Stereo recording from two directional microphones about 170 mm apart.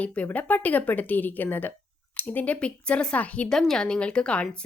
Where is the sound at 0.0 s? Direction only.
10° left (ahead or behind).